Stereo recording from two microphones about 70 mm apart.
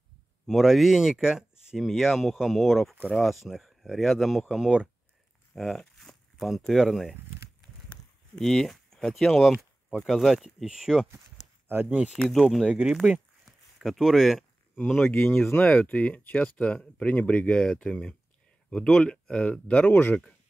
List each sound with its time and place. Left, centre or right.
0.5 s speech: centre
5.5 s a sound: centre
6.7 s speech: centre
8.4 s speech: centre
11.7 s speech: right
12.2 s speech: centre
12.6 s speech: centre
13.5 s a sound: centre
15.0 s speech: left